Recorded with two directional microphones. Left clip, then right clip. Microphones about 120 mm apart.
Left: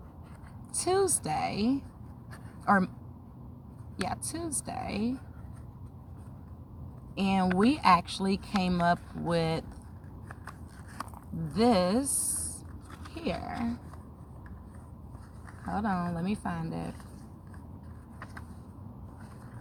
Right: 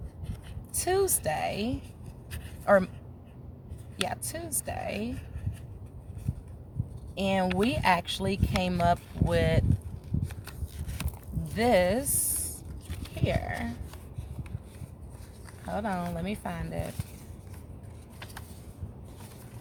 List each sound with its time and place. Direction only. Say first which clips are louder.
0.8 s speech: even; 60° right (ahead or behind)
4.0 s speech: right 1 dB; 55° right (ahead or behind)
7.2 s speech: right 1 dB; 55° right (ahead or behind)
11.5 s speech: right 2 dB; 55° right (ahead or behind)
15.7 s speech: even; 55° right (ahead or behind)